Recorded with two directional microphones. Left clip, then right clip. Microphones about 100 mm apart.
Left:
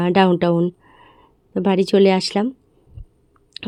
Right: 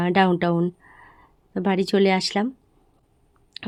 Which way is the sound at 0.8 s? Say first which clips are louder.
Left 1 dB; 40° left (ahead or behind).